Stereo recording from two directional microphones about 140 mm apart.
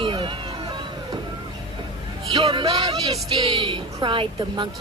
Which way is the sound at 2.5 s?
45° right (ahead or behind).